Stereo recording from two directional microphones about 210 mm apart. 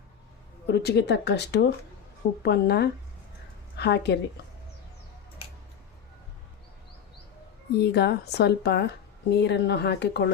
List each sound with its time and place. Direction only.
0.7 s speech: 55° left (ahead or behind)
7.7 s speech: 50° left (ahead or behind)